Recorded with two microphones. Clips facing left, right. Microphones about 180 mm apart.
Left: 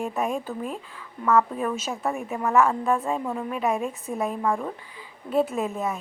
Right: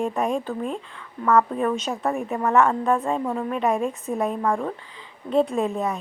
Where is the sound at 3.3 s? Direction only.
35° right (ahead or behind).